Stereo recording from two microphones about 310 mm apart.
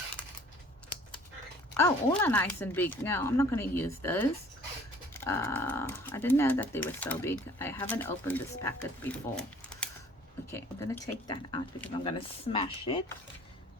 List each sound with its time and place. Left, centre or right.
1.7 s speech: centre
10.5 s speech: centre